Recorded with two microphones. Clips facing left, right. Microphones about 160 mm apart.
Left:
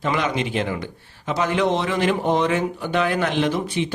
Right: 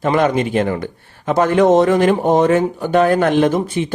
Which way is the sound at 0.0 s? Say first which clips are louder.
Right 7 dB; 50° right (ahead or behind).